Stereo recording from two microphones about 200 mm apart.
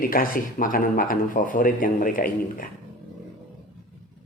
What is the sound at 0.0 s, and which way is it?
A man's voice, 45° left (ahead or behind).